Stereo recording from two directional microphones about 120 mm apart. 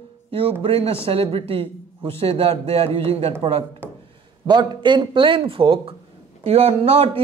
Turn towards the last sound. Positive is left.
turn(degrees=-55)  # may be behind; listen again after turning